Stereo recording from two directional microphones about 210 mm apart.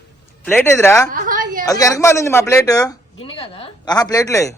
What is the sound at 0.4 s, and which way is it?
Speech, 10° left (ahead or behind).